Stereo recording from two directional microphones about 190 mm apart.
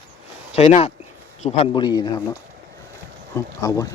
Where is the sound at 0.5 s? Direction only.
35° left (ahead or behind).